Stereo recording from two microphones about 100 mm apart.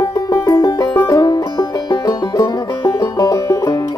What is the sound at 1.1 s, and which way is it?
Music, 40° left (ahead or behind).